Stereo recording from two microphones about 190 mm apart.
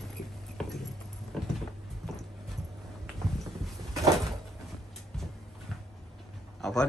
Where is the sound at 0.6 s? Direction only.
5° left (ahead or behind).